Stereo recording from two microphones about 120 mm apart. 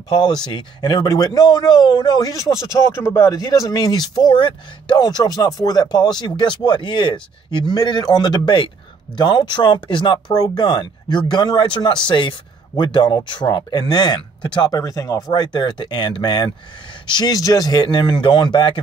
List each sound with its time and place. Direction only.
0.1 s speech: 35° left (ahead or behind)